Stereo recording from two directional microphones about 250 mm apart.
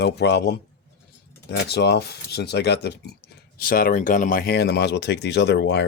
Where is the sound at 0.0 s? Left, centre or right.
Left.